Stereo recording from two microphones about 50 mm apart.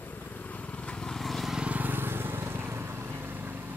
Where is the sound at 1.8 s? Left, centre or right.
Right.